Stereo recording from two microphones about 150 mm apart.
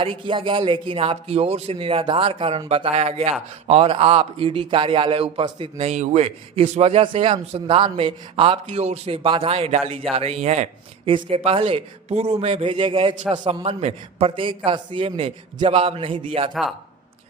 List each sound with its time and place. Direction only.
0.0 s a man's voice: 35° right (ahead or behind)